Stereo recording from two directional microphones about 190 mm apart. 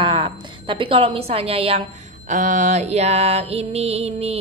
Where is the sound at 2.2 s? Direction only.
40° right (ahead or behind).